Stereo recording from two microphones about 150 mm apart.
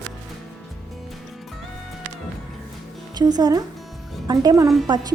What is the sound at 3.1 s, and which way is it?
A woman's voice, 25° right (ahead or behind).